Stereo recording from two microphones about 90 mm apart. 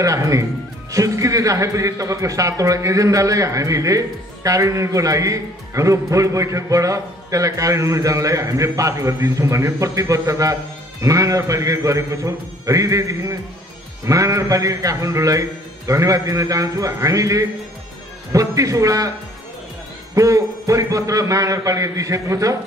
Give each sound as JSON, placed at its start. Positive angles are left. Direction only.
{"t": 0.0, "sound": "a man's voice", "side_deg": -40}
{"t": 20.2, "sound": "a man's voice", "side_deg": -35}